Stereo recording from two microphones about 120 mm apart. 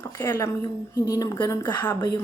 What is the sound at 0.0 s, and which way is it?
A woman's voice, 25° left (ahead or behind).